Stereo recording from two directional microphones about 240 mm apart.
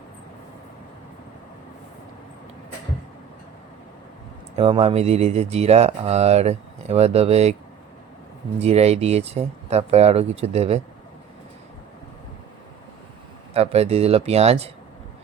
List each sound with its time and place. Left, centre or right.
4.5 s speech: right
8.5 s speech: right
13.5 s speech: right